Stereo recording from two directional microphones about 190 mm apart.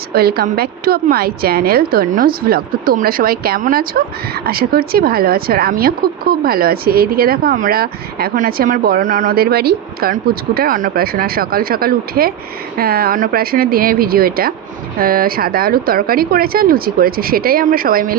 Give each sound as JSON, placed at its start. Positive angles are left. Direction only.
{"t": 0.1, "sound": "a woman's voice", "side_deg": -55}